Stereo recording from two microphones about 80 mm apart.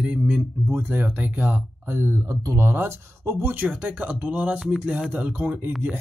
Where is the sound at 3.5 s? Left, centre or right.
Centre.